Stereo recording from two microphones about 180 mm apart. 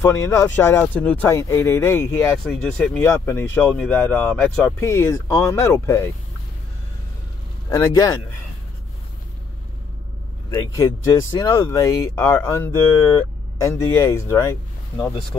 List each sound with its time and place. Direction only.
0.0 s speech: 15° left (ahead or behind)
7.7 s speech: 20° left (ahead or behind)
10.5 s speech: 15° left (ahead or behind)